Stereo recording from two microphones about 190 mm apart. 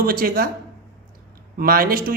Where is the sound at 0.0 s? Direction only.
50° right (ahead or behind).